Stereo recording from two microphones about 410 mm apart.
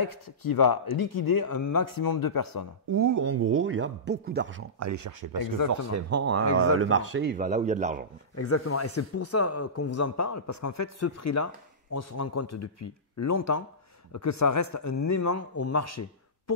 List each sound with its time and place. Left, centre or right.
0.5 s speech: left
2.9 s speech: right
4.7 s speech: right
6.1 s speech: right
8.4 s a man's voice: left